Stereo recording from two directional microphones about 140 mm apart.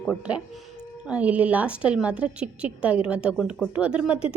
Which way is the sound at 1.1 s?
10° right (ahead or behind).